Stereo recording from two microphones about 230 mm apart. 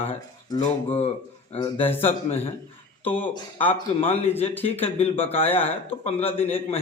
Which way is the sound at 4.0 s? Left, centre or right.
Left.